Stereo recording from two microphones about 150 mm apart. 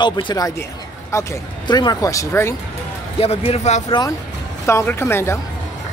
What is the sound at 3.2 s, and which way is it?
Speech, 40° left (ahead or behind).